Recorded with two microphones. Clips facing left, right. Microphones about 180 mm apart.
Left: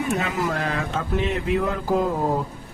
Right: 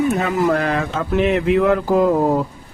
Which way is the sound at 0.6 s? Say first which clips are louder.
Right 6 dB; 75° right (ahead or behind).